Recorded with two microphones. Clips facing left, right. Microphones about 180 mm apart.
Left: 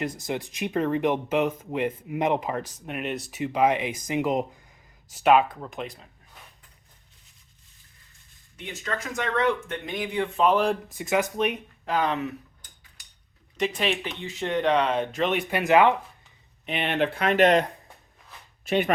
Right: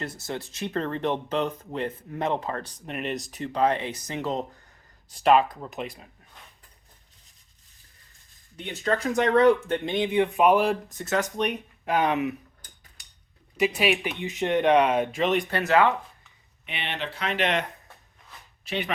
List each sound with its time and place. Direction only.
0.0 s speech: 15° left (ahead or behind); by 6.1 s 5° right (ahead or behind)
8.5 s speech: 35° right (ahead or behind); by 10.8 s 10° right (ahead or behind)
10.8 s speech: 10° left (ahead or behind)
11.9 s speech: 15° right (ahead or behind)
13.6 s speech: 10° right (ahead or behind)
15.4 s speech: 15° left (ahead or behind)
16.6 s speech: 45° left (ahead or behind)